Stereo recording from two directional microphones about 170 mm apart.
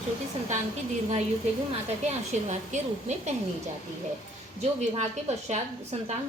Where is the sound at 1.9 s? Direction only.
40° right (ahead or behind).